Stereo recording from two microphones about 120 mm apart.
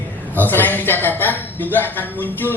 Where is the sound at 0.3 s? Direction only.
15° left (ahead or behind).